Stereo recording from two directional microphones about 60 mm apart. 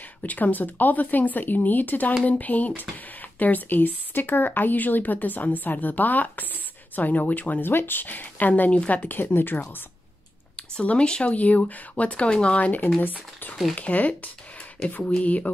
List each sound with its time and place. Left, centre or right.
0.2 s speech: left
10.5 s speech: left